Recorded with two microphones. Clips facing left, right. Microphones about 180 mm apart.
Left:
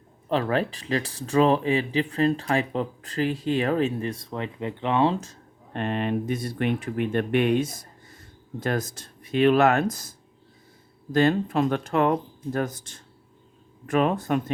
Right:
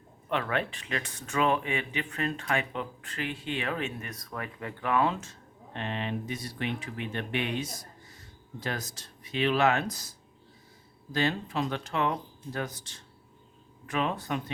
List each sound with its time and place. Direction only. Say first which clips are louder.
0.3 s speech: left 6 dB; 35° left (ahead or behind)